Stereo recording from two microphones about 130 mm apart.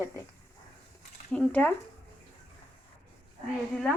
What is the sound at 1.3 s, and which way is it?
Speech, 10° left (ahead or behind).